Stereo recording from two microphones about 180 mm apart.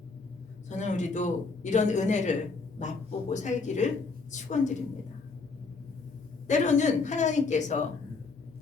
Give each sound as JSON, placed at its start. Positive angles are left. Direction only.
{"t": 0.7, "sound": "speech", "side_deg": 40}
{"t": 6.5, "sound": "speech", "side_deg": 40}